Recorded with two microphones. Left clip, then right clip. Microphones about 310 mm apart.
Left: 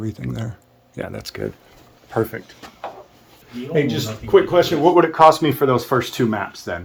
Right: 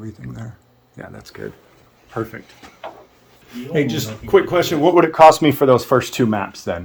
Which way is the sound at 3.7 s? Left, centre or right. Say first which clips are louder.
Even; right.